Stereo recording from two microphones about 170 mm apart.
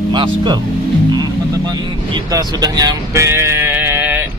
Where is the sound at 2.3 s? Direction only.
25° right (ahead or behind).